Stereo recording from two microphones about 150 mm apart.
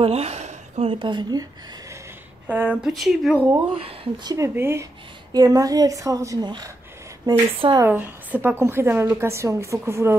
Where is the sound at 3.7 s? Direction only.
35° right (ahead or behind).